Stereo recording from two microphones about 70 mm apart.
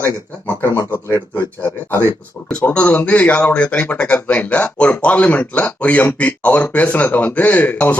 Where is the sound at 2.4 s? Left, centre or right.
Centre.